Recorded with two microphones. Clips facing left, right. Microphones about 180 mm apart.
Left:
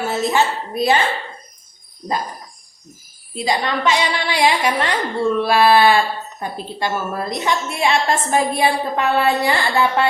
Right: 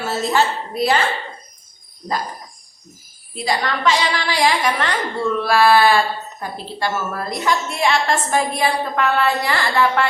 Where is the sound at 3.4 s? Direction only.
20° left (ahead or behind).